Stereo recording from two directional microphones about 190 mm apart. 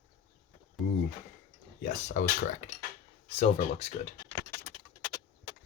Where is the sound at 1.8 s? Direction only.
40° left (ahead or behind).